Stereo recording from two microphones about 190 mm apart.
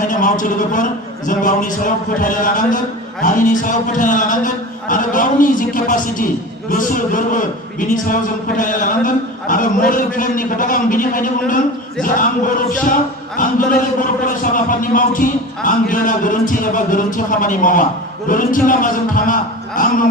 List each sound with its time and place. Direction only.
0.1 s a man's voice: 45° left (ahead or behind)